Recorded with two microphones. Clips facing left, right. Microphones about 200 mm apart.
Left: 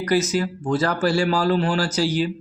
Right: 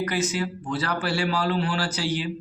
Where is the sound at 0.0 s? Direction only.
40° left (ahead or behind).